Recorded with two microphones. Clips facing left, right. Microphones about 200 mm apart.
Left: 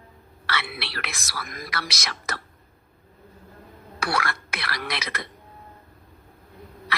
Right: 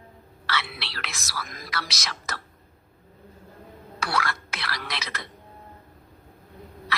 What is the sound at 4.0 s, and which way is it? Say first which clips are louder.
Speech: left 1 dB; 60° left (ahead or behind).